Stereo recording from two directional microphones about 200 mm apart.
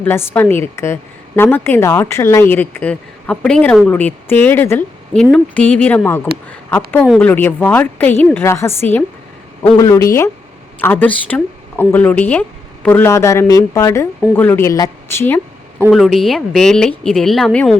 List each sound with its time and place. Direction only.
0.0 s speech: 10° left (ahead or behind)
15.9 s a woman's voice: centre (ahead or behind)